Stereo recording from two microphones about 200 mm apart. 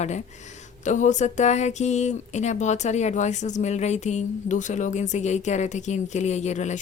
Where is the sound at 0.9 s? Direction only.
40° left (ahead or behind).